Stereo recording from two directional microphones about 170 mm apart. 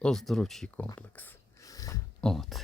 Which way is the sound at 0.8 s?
10° left (ahead or behind).